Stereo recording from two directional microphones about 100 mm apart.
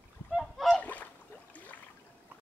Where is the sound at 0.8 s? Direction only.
15° left (ahead or behind).